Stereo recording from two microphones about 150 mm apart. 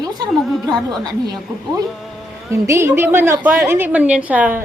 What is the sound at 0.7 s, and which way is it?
Speech, 25° right (ahead or behind).